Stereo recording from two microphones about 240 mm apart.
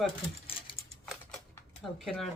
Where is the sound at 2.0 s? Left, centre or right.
Centre.